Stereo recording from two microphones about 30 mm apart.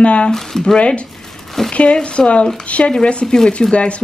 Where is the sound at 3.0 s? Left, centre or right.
Left.